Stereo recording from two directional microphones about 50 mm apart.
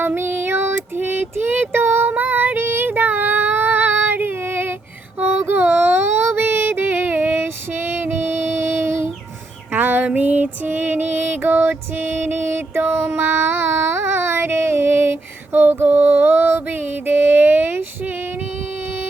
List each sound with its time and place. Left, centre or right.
0.0 s child singing: right
5.2 s music: right
5.5 s a sound: right
9.7 s female singing: right
10.2 s music: right